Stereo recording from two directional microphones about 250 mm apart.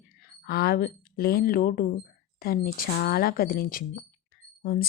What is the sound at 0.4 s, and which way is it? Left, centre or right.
Speech, left.